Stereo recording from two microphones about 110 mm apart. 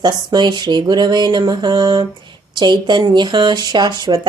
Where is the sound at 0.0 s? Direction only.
40° right (ahead or behind).